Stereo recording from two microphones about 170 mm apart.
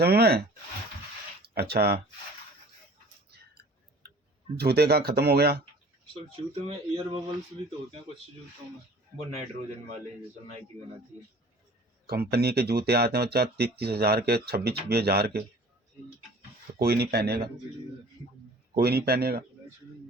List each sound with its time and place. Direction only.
0.0 s speech: 70° right (ahead or behind)
1.5 s speech: 70° right (ahead or behind)
4.5 s speech: 70° right (ahead or behind)
6.3 s speech: 35° right (ahead or behind)
12.0 s speech: 65° right (ahead or behind)
16.7 s speech: 65° right (ahead or behind)
18.8 s speech: 65° right (ahead or behind)